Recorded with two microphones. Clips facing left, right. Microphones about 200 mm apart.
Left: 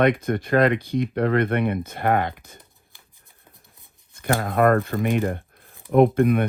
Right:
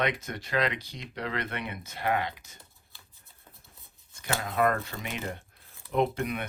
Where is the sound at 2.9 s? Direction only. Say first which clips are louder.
Even; 15° left (ahead or behind).